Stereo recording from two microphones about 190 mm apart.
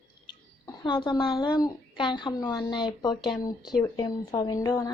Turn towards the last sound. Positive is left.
turn(degrees=20)  # may be behind; listen again after turning